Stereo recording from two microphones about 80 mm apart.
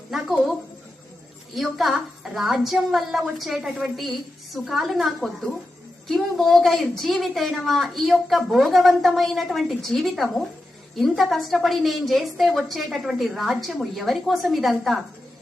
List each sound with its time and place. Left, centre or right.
0.1 s speech: centre
1.5 s a woman's voice: centre